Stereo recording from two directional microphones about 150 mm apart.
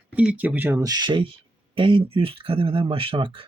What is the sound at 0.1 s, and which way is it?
Speech, 10° right (ahead or behind).